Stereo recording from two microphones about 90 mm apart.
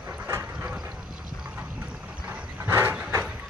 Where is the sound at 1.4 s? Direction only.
20° right (ahead or behind).